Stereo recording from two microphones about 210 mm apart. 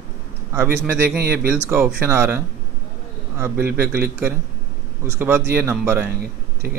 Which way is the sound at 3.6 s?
45° right (ahead or behind).